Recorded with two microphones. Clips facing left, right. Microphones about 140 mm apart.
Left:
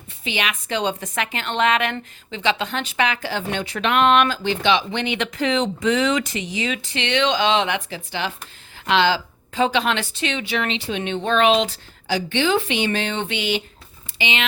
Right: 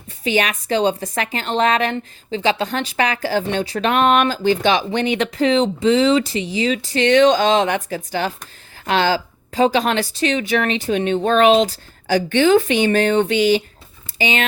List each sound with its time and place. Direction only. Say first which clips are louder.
0.3 s speech: right 7 dB; 40° right (ahead or behind)